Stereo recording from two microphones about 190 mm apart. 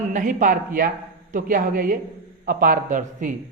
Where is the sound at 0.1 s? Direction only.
45° right (ahead or behind).